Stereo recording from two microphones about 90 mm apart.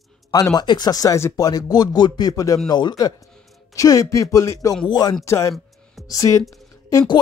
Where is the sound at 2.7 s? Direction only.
50° left (ahead or behind).